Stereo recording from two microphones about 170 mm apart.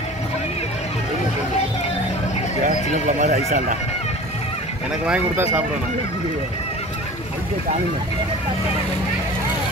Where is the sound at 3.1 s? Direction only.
45° right (ahead or behind).